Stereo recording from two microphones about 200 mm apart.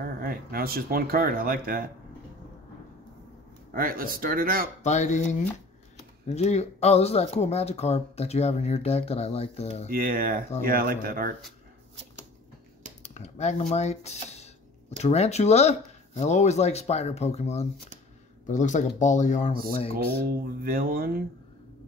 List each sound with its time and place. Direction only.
0.2 s speech: 50° right (ahead or behind)
3.7 s speech: 45° right (ahead or behind)
4.8 s speech: 35° left (ahead or behind)
9.8 s speech: 45° right (ahead or behind)
13.0 s speech: 35° left (ahead or behind)
20.6 s speech: 50° right (ahead or behind)